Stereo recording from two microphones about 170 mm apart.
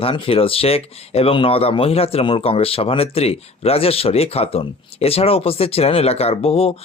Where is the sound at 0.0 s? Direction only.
35° left (ahead or behind).